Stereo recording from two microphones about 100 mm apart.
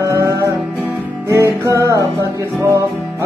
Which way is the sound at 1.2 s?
30° right (ahead or behind).